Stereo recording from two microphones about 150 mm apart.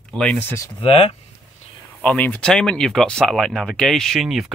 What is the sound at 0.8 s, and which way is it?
Speech, 40° left (ahead or behind).